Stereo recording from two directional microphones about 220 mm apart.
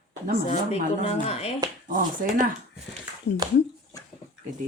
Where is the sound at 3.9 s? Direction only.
15° left (ahead or behind).